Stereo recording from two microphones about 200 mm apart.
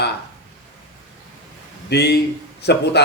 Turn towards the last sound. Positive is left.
turn(degrees=55)  # may be behind; listen again after turning